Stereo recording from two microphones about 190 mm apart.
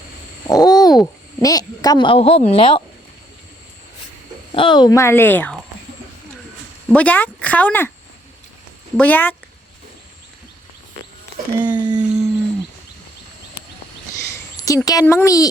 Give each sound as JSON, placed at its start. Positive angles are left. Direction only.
{"t": 0.4, "sound": "babbling", "side_deg": 20}
{"t": 1.4, "sound": "speech", "side_deg": 20}
{"t": 4.5, "sound": "a woman's voice", "side_deg": 25}
{"t": 6.8, "sound": "a woman's voice", "side_deg": 5}
{"t": 9.0, "sound": "a woman's voice", "side_deg": 10}
{"t": 11.6, "sound": "a sound", "side_deg": -25}
{"t": 14.5, "sound": "a sound", "side_deg": 20}
{"t": 14.8, "sound": "a woman's voice", "side_deg": 15}